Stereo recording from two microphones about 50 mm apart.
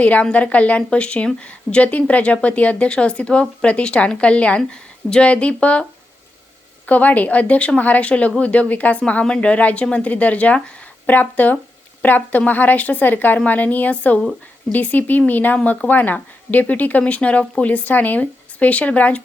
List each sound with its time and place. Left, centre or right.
0.0 s speech: left
6.8 s a woman's voice: left